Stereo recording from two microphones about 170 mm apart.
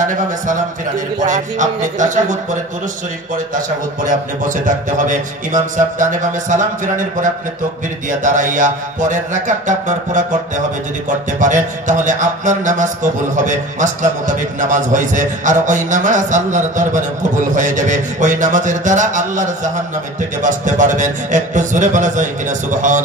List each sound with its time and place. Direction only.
0.0 s music: 50° right (ahead or behind)